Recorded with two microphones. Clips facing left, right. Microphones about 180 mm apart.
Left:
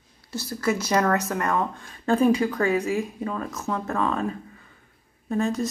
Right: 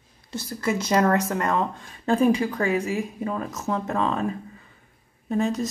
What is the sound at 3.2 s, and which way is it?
Speech, 20° right (ahead or behind).